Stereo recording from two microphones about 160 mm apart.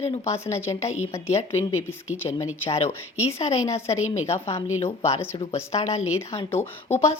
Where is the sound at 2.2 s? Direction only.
40° left (ahead or behind).